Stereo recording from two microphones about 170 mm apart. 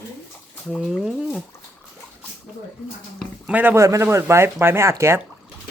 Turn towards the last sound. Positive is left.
turn(degrees=-15)  # may be behind; listen again after turning